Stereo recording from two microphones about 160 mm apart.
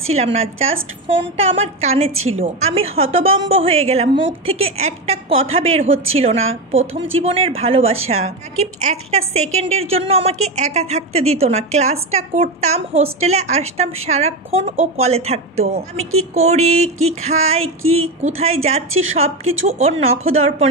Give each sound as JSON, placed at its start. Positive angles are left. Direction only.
{"t": 0.1, "sound": "a woman's voice", "side_deg": -40}
{"t": 16.0, "sound": "a sound", "side_deg": -40}
{"t": 18.2, "sound": "a woman's voice", "side_deg": -40}